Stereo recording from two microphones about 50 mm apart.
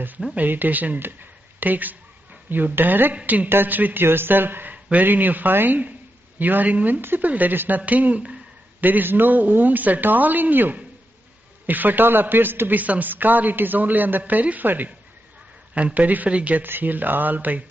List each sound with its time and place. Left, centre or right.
0.5 s a man's voice: right
4.0 s a man's voice: right
16.6 s a man's voice: right